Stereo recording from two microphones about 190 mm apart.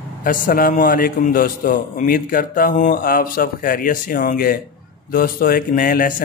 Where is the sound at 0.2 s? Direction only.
45° left (ahead or behind).